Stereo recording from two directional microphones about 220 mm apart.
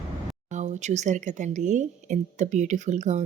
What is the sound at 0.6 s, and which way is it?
Speech, 30° right (ahead or behind).